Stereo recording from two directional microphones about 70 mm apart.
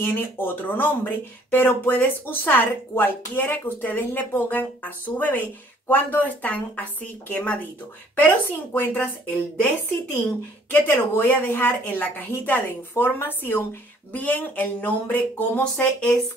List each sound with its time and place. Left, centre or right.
0.0 s speech: left
10.7 s speech: left